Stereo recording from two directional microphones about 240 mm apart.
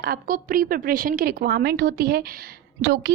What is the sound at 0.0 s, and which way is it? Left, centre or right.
A woman's voice, right.